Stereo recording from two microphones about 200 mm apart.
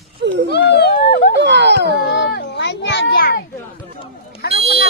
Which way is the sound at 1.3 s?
60° right (ahead or behind).